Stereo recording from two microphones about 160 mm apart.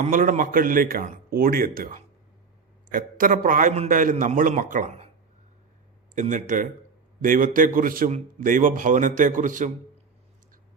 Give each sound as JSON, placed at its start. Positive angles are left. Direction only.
{"t": 0.0, "sound": "a man's voice", "side_deg": -60}
{"t": 6.1, "sound": "a man's voice", "side_deg": -50}